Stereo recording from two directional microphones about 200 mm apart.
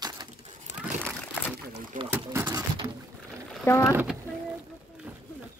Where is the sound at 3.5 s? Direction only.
10° left (ahead or behind).